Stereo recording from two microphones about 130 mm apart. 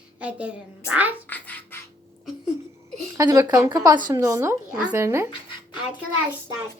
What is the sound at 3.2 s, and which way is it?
A woman's voice, 30° right (ahead or behind).